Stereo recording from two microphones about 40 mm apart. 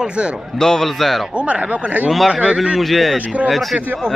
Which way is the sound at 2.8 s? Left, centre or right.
Centre.